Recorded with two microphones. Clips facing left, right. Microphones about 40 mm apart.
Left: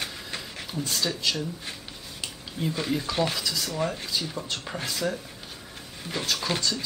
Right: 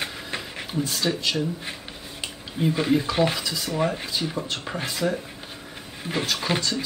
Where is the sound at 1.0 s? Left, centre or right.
Centre.